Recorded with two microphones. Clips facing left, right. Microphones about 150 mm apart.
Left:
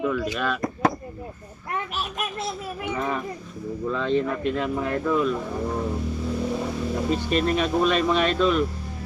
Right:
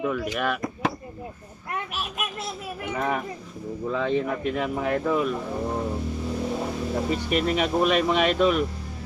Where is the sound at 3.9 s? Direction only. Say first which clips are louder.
Left 1 dB; 15° right (ahead or behind).